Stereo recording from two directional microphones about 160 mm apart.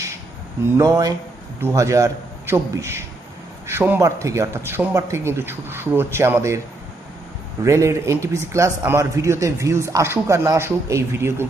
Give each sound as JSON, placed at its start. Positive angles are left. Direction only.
{"t": 0.8, "sound": "a man's voice", "side_deg": -25}
{"t": 7.6, "sound": "speech", "side_deg": -20}